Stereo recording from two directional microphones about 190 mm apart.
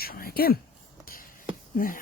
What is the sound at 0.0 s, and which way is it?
Speech, 50° left (ahead or behind).